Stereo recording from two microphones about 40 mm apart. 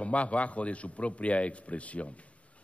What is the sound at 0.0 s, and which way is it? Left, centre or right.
A man's voice, left.